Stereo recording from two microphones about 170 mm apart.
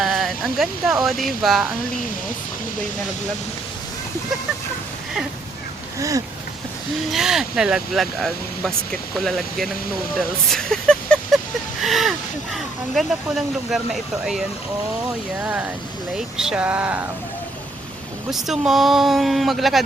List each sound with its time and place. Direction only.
0.0 s speech: centre (ahead or behind)
6.0 s speech: 20° right (ahead or behind)
7.1 s speech: centre (ahead or behind)
18.3 s speech: centre (ahead or behind)